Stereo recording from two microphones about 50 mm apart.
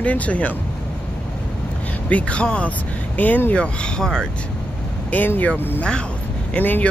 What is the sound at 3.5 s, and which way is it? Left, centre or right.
Speech, left.